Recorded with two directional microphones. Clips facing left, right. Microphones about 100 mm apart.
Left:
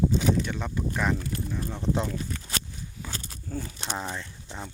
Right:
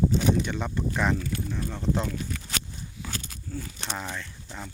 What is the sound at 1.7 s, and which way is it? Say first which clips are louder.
Speech: even; 15° left (ahead or behind).